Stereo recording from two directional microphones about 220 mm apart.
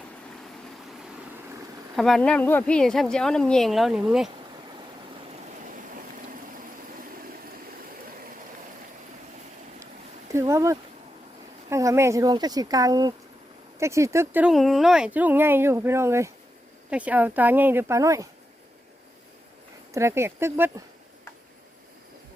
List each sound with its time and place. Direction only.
2.0 s speech: centre (ahead or behind)
10.3 s speech: 15° right (ahead or behind)
19.9 s speech: 10° right (ahead or behind)